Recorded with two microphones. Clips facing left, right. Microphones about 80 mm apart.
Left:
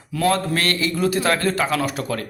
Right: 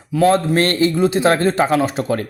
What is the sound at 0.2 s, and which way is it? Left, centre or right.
A man's voice, right.